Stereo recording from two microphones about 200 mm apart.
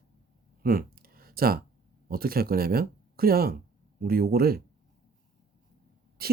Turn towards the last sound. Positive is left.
turn(degrees=-50)  # may be behind; listen again after turning